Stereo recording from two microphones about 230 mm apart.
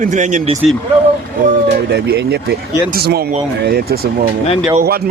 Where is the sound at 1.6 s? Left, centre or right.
Right.